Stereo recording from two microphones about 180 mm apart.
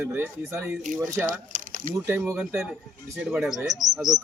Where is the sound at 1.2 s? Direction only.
50° right (ahead or behind).